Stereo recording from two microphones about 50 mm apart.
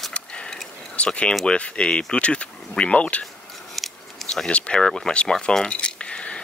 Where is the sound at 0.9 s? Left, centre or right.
Left.